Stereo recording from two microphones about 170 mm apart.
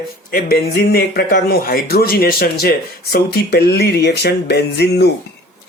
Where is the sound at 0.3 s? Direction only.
65° left (ahead or behind).